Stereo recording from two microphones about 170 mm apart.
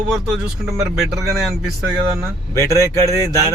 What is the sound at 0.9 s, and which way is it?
Speech, centre (ahead or behind).